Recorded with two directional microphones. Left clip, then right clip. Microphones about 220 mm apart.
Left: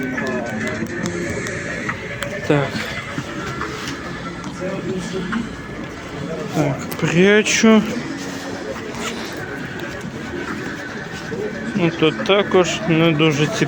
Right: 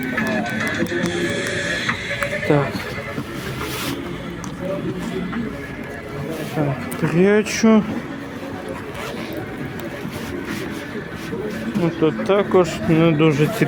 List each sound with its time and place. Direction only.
1.1 s music: 35° right (ahead or behind)
2.5 s speech: 5° right (ahead or behind)
7.0 s speech: 5° left (ahead or behind)
11.8 s speech: 5° left (ahead or behind)